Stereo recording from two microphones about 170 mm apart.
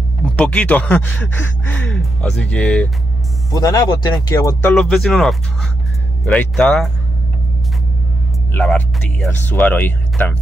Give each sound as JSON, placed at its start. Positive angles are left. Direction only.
{"t": 0.4, "sound": "speech", "side_deg": 5}
{"t": 3.5, "sound": "speech", "side_deg": 20}
{"t": 4.6, "sound": "speech", "side_deg": 5}
{"t": 8.5, "sound": "speech", "side_deg": 5}